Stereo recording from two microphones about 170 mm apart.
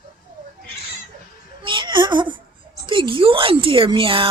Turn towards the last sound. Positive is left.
turn(degrees=-30)  # may be behind; listen again after turning